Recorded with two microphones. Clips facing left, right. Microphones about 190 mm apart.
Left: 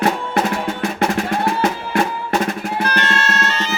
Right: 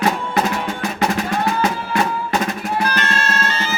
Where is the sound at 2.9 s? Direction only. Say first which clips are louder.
Left 1 dB; 70° left (ahead or behind).